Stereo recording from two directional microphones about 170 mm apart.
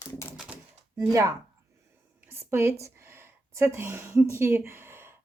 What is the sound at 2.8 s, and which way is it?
Speech, 15° right (ahead or behind).